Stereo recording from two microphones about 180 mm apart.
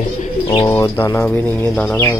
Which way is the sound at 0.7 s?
15° left (ahead or behind).